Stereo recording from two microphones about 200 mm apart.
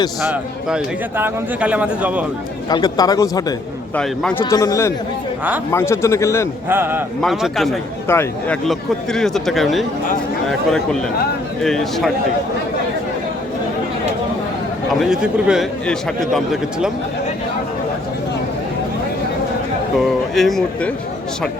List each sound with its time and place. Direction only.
0.2 s speech: 5° right (ahead or behind)
2.6 s speech: 20° left (ahead or behind)
3.9 s a man's voice: 5° left (ahead or behind)
6.7 s speech: 10° right (ahead or behind)
7.2 s speech: centre (ahead or behind)
8.0 s a man's voice: 10° left (ahead or behind)
11.6 s speech: centre (ahead or behind)
15.1 s speech: 5° right (ahead or behind)
20.0 s speech: centre (ahead or behind)